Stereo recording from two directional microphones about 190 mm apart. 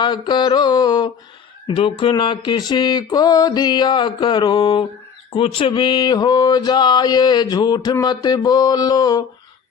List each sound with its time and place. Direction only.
0.0 s mantra: 25° left (ahead or behind)